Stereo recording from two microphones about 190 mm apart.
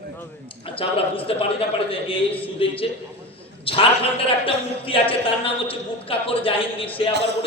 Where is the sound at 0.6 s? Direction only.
30° left (ahead or behind).